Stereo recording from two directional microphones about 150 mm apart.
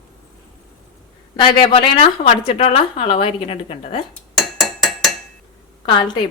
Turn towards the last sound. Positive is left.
turn(degrees=30)  # may be behind; listen again after turning